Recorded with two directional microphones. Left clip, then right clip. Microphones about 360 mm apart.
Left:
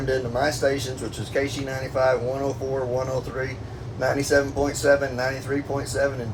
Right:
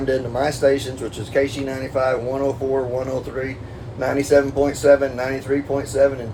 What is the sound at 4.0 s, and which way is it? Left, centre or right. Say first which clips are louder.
Speech: right 4 dB; right.